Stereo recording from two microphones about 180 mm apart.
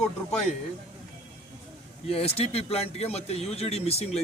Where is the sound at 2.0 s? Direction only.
35° left (ahead or behind).